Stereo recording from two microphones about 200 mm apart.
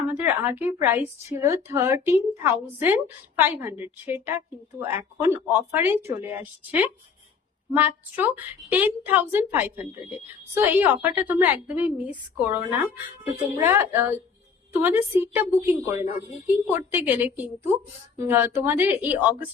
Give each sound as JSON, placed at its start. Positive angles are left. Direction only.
{"t": 0.1, "sound": "a woman's voice", "side_deg": -10}